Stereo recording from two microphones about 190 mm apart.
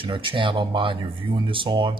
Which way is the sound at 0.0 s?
25° right (ahead or behind).